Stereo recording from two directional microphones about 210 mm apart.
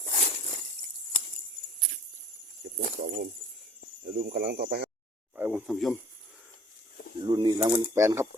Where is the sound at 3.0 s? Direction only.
50° right (ahead or behind).